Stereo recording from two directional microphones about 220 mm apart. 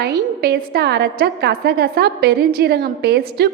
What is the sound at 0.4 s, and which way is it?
A woman's voice, 45° right (ahead or behind).